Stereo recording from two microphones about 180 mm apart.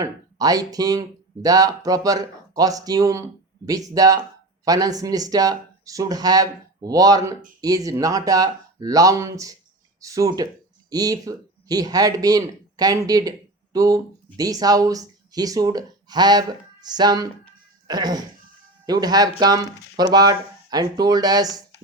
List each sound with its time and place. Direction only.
0.0 s speech: 20° right (ahead or behind)